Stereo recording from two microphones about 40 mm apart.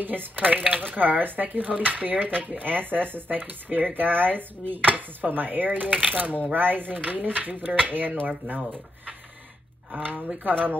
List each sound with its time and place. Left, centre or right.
0.0 s speech: right
8.3 s speech: right
10.0 s speech: right